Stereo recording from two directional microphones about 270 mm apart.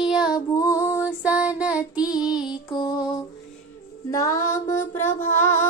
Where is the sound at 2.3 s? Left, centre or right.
Centre.